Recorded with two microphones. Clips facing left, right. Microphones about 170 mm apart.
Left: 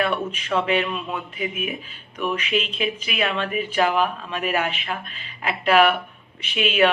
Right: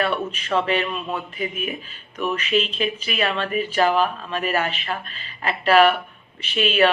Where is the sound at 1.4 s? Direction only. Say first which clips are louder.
Even; 10° left (ahead or behind).